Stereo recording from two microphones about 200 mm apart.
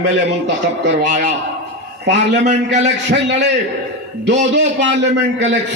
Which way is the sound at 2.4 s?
35° right (ahead or behind).